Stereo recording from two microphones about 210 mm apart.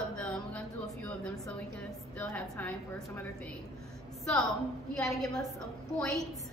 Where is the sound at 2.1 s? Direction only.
5° left (ahead or behind).